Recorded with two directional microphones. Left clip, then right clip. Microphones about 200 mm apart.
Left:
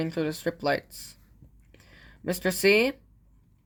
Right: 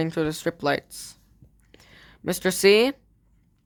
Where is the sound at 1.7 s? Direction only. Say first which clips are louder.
Right 3 dB; 35° right (ahead or behind).